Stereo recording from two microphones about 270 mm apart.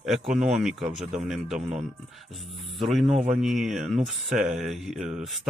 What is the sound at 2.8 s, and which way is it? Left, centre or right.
Speech, centre.